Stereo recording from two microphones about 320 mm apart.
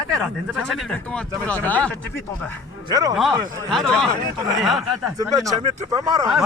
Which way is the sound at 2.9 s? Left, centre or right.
Centre.